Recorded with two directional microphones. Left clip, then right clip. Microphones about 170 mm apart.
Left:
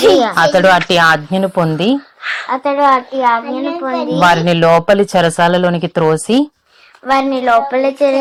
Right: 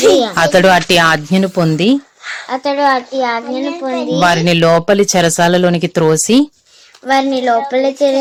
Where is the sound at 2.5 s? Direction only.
20° right (ahead or behind).